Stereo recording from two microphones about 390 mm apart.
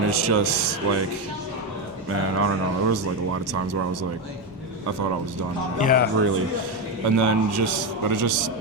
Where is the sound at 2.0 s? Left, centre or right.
Right.